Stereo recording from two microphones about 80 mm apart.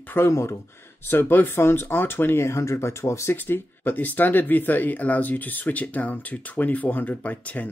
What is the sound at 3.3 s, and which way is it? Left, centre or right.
Speech, left.